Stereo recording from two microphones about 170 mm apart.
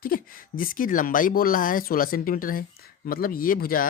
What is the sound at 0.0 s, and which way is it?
Speech, 55° left (ahead or behind).